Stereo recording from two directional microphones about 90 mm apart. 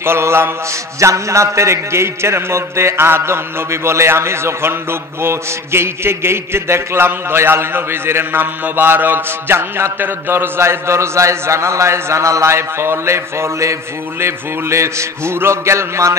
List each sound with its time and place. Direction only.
0.0 s a man's voice: 30° right (ahead or behind)